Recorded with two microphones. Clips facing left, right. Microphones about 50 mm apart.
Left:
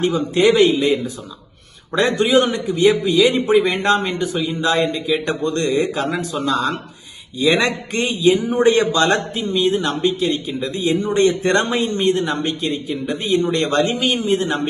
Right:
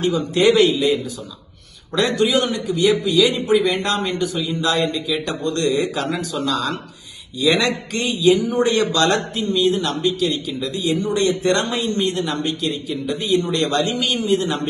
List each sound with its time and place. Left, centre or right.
0.0 s a man's voice: left
0.3 s a man's voice: centre
0.7 s a man's voice: left